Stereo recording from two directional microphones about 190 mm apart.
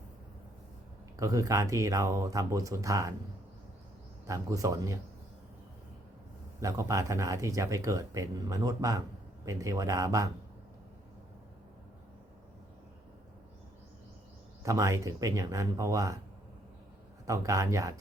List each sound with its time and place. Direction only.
1.2 s speech: 15° right (ahead or behind)
4.3 s speech: 15° right (ahead or behind)
6.6 s speech: 15° right (ahead or behind)
14.6 s speech: 15° right (ahead or behind)
17.2 s speech: 15° right (ahead or behind)